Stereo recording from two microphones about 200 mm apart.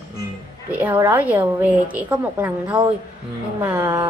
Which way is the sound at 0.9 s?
10° right (ahead or behind).